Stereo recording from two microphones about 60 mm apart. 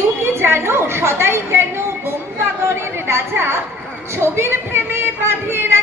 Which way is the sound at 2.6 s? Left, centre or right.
Right.